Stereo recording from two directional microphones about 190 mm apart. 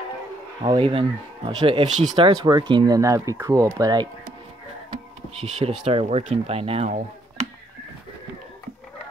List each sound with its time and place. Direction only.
0.6 s speech: 25° right (ahead or behind)
5.4 s speech: 35° right (ahead or behind)